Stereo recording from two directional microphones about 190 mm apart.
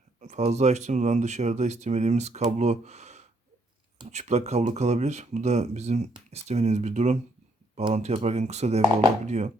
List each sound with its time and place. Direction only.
0.2 s speech: 35° right (ahead or behind)